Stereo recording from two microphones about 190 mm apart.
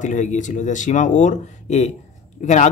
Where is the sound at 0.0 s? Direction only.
40° left (ahead or behind).